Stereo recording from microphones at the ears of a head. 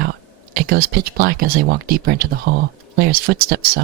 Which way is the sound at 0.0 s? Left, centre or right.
Right.